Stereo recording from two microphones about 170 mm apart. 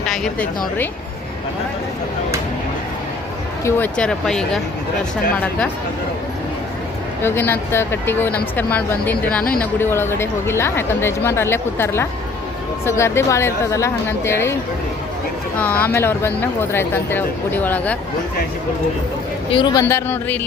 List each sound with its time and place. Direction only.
0.0 s speech: 5° left (ahead or behind)
3.6 s speech: 15° left (ahead or behind)
3.9 s speech: 5° left (ahead or behind)
7.2 s speech: 10° left (ahead or behind)
15.5 s speech: 10° left (ahead or behind)
19.5 s speech: 30° left (ahead or behind)
19.8 s speech: 15° left (ahead or behind)